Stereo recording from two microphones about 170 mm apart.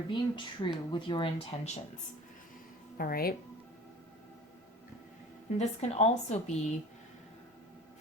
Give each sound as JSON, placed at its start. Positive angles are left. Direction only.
{"t": 0.1, "sound": "a woman's voice", "side_deg": 30}
{"t": 3.0, "sound": "speech", "side_deg": 60}
{"t": 5.5, "sound": "a woman's voice", "side_deg": 40}